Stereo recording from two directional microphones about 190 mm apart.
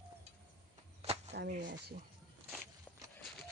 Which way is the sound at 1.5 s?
45° right (ahead or behind).